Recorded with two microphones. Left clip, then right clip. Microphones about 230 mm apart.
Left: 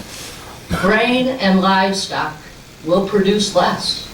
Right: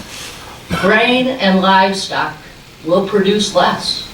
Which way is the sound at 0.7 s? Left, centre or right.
Centre.